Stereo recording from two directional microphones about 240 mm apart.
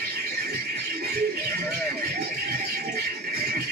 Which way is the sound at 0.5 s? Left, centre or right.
Right.